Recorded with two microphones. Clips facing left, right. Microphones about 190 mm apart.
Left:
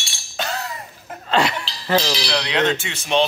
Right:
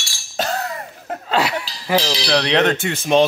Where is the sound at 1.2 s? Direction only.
5° right (ahead or behind).